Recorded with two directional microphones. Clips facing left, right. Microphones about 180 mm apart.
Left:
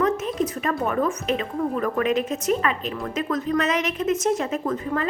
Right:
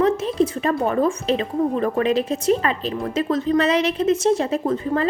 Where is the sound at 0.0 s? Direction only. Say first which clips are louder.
Right 4 dB; 30° right (ahead or behind).